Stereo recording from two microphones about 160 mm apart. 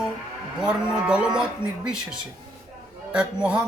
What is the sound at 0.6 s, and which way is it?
Livestock, 5° right (ahead or behind).